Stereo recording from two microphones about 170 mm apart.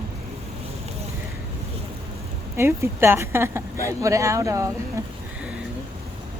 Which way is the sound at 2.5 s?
15° right (ahead or behind).